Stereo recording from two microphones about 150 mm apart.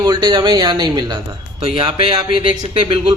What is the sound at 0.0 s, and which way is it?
Speech, 30° right (ahead or behind).